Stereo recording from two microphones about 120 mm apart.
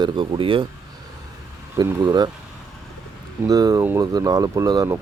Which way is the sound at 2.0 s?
35° right (ahead or behind).